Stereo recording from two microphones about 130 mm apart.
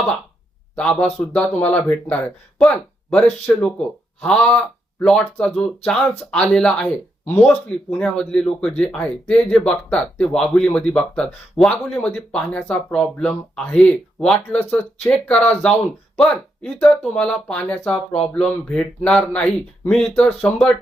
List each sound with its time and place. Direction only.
0.8 s speech: 10° left (ahead or behind)